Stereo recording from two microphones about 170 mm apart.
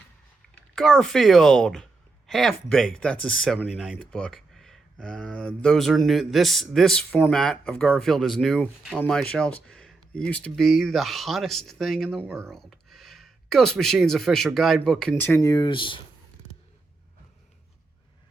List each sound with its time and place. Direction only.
0.5 s speech: 5° left (ahead or behind)
15.4 s speech: 25° left (ahead or behind)